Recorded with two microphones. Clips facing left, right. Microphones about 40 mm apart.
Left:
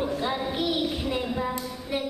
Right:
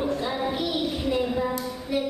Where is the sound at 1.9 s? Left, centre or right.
Centre.